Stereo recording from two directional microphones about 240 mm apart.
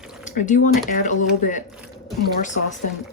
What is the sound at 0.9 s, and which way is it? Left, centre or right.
Speech, left.